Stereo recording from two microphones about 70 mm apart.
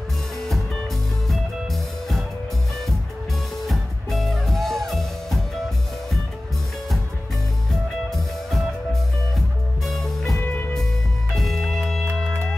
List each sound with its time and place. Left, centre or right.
1.2 s music: centre
3.6 s music: centre
8.1 s music: centre
9.8 s music: centre
10.4 s music: left
11.3 s music: centre
12.0 s music: right